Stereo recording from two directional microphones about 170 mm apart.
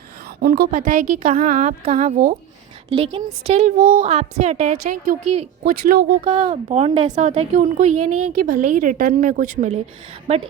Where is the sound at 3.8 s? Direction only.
60° right (ahead or behind).